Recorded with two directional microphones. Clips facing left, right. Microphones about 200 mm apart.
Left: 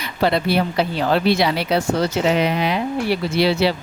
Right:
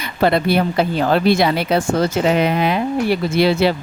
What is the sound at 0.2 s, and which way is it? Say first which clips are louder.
Speech: right 3 dB; 50° right (ahead or behind).